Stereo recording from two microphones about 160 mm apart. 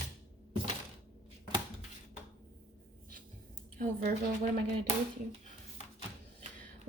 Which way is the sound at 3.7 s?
65° right (ahead or behind).